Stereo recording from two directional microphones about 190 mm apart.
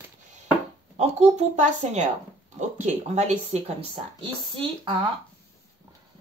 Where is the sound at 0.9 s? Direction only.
35° right (ahead or behind).